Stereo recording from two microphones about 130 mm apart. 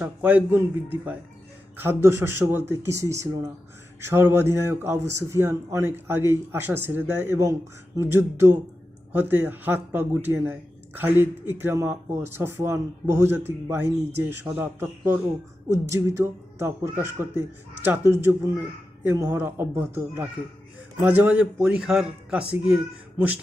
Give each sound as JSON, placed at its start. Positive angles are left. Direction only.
{"t": 0.0, "sound": "speech", "side_deg": -10}